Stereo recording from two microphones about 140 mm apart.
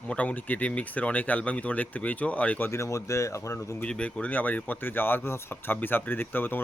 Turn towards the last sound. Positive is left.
turn(degrees=15)  # may be behind; listen again after turning